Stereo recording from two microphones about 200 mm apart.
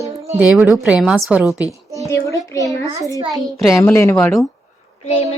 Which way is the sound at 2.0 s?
15° left (ahead or behind).